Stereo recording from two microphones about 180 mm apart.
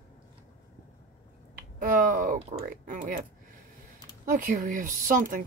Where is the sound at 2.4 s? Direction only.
35° right (ahead or behind).